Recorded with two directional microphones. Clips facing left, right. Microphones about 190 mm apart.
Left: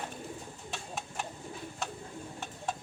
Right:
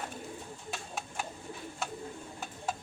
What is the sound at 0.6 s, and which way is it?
Bird, centre (ahead or behind).